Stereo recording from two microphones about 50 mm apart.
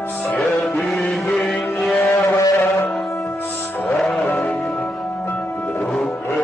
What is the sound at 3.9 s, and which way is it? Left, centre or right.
Music, centre.